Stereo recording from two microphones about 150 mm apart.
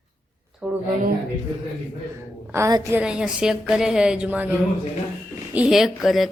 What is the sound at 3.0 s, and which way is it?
A woman's voice, 5° right (ahead or behind).